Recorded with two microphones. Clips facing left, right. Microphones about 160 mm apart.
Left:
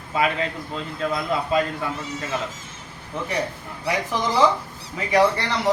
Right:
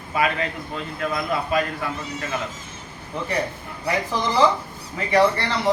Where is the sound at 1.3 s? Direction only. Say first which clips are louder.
Left 1 dB; 20° left (ahead or behind).